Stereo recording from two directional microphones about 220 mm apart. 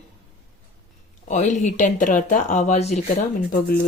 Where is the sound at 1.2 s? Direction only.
35° left (ahead or behind).